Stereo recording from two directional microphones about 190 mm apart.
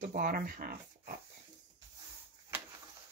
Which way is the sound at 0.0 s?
45° right (ahead or behind).